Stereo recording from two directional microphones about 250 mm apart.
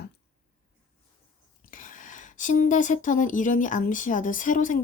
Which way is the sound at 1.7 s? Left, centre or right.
Left.